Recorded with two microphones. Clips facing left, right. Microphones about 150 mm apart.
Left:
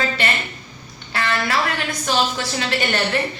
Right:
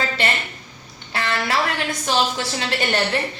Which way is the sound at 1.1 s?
25° right (ahead or behind).